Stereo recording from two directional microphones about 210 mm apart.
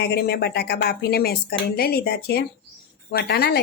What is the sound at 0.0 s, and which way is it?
Speech, 50° left (ahead or behind).